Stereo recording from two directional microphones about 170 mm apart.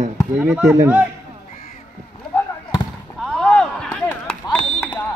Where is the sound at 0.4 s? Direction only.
5° right (ahead or behind).